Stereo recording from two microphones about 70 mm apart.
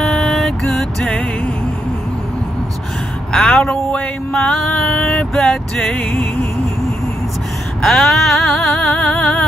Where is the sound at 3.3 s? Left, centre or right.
Centre.